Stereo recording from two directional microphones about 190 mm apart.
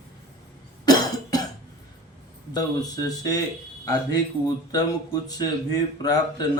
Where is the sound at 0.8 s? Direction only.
20° left (ahead or behind).